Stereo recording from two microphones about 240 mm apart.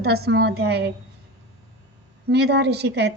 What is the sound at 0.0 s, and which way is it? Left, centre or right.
Speech, right.